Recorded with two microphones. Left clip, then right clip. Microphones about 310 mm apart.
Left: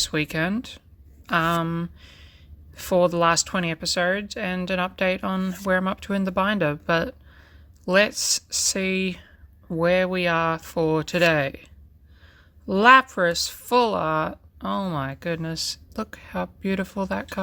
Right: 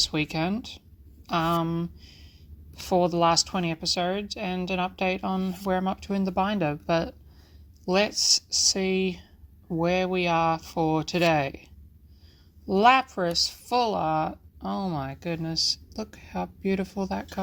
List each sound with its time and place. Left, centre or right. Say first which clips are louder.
0.0 s speech: left 2 dB; left
12.6 s speech: left 5 dB; left